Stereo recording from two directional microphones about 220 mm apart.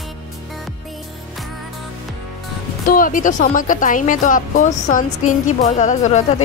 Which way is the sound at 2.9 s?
40° left (ahead or behind).